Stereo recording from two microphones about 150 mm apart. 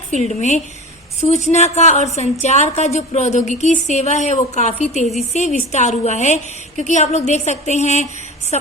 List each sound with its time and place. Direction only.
0.1 s a woman's voice: 50° left (ahead or behind)